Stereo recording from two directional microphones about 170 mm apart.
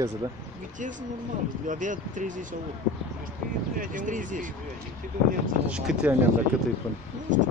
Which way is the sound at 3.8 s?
50° right (ahead or behind).